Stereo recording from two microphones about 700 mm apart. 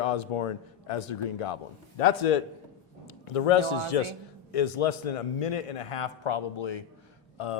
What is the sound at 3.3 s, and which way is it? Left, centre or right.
Speech, left.